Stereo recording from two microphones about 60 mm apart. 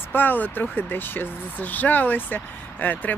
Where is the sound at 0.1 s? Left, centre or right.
Left.